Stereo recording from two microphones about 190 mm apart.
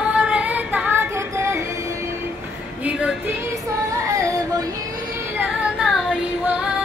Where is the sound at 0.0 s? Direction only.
5° right (ahead or behind).